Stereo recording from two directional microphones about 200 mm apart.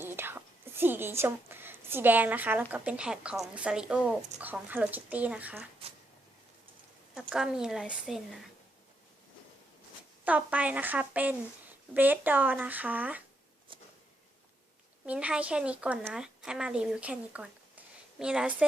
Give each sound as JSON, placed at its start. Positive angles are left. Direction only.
{"t": 0.0, "sound": "whispering", "side_deg": -10}
{"t": 2.7, "sound": "a woman's voice", "side_deg": -5}
{"t": 7.1, "sound": "a woman's voice", "side_deg": -5}
{"t": 10.2, "sound": "speech", "side_deg": -5}
{"t": 13.7, "sound": "a sound", "side_deg": -25}
{"t": 15.0, "sound": "speech", "side_deg": -5}